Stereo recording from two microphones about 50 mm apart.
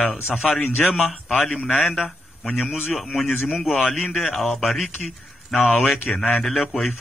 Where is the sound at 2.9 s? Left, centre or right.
Centre.